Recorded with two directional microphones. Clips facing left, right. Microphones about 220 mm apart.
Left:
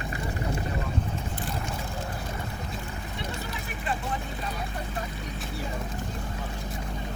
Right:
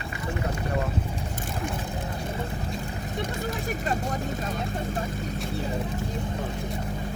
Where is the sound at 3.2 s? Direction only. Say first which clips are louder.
Right 6 dB; 45° right (ahead or behind).